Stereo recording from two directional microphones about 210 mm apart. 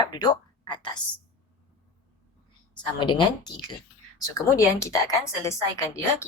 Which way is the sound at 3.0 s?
20° left (ahead or behind).